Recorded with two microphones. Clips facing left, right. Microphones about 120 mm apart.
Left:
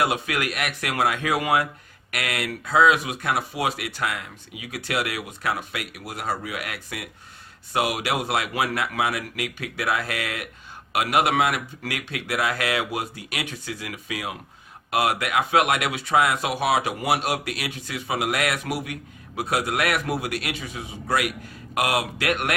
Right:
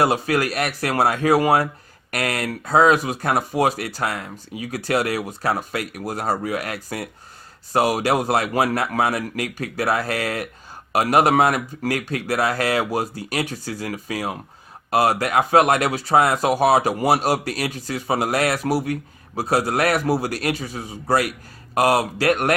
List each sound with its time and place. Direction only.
0.0 s speech: 35° right (ahead or behind)